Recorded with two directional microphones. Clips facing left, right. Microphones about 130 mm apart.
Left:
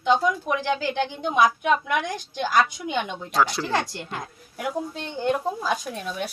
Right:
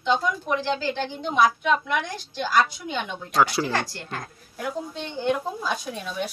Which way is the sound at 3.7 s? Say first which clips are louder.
Left 2 dB; 20° left (ahead or behind).